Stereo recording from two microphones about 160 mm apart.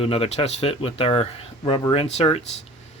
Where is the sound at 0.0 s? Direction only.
35° left (ahead or behind).